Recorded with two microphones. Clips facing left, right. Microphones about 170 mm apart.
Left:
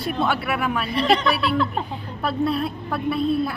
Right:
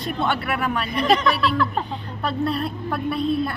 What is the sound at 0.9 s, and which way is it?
Speech, 30° left (ahead or behind).